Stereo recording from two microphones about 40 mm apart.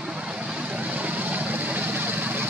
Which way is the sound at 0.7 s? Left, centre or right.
Right.